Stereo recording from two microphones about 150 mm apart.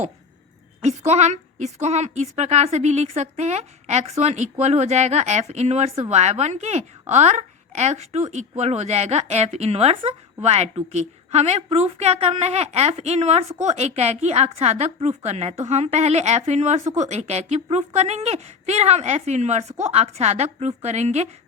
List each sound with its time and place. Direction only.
0.8 s a woman's voice: 50° right (ahead or behind)